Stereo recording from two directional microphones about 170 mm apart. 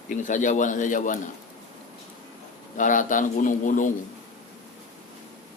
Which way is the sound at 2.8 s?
50° left (ahead or behind).